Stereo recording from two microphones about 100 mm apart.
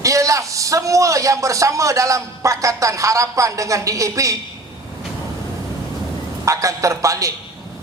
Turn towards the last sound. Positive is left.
turn(degrees=-35)  # may be behind; listen again after turning